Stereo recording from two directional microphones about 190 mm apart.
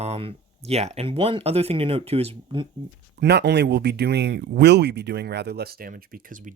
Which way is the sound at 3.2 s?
60° right (ahead or behind).